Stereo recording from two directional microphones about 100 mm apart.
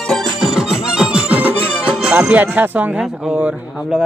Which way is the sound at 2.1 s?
15° right (ahead or behind).